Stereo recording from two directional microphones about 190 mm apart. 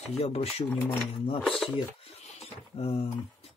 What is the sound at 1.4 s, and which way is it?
Speech, 5° left (ahead or behind).